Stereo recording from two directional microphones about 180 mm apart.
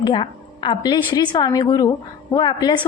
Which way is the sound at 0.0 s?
25° left (ahead or behind).